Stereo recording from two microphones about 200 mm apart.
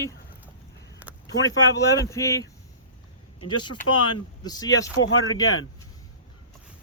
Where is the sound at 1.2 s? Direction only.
70° left (ahead or behind).